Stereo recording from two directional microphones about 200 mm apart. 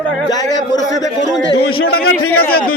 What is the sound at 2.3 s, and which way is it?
Speech, 50° left (ahead or behind).